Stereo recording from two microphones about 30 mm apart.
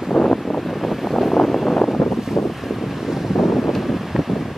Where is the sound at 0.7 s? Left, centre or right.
Centre.